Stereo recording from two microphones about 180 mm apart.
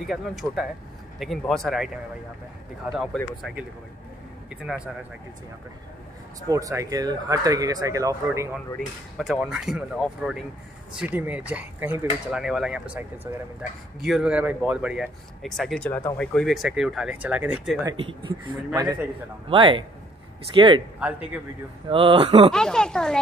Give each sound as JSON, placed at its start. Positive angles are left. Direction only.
{"t": 0.0, "sound": "speech", "side_deg": 0}
{"t": 2.9, "sound": "speech", "side_deg": 0}
{"t": 4.5, "sound": "speech", "side_deg": -5}
{"t": 6.5, "sound": "speech", "side_deg": -15}
{"t": 8.7, "sound": "speech", "side_deg": 0}
{"t": 17.8, "sound": "speech", "side_deg": -30}
{"t": 19.5, "sound": "speech", "side_deg": -30}
{"t": 21.0, "sound": "a man's voice", "side_deg": -10}
{"t": 21.8, "sound": "speech", "side_deg": -30}
{"t": 22.5, "sound": "speech", "side_deg": 5}